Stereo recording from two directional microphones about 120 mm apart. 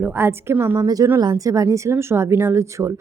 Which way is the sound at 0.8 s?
30° right (ahead or behind).